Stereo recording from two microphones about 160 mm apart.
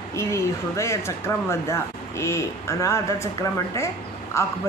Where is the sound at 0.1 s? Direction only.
20° left (ahead or behind).